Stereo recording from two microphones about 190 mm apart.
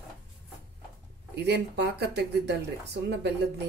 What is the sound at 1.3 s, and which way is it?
Speech, 60° right (ahead or behind).